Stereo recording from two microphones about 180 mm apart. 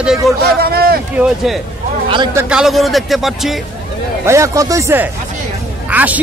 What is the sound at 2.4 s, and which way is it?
Speech, 5° right (ahead or behind).